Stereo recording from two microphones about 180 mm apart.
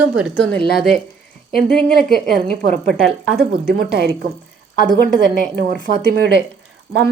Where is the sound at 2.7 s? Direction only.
5° left (ahead or behind).